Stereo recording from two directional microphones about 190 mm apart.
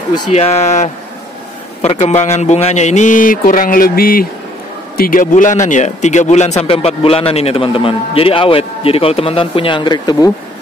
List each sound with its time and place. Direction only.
0.3 s a man's voice: 35° left (ahead or behind)